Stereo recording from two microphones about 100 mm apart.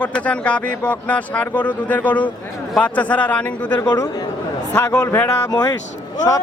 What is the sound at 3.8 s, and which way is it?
Speech, 40° left (ahead or behind).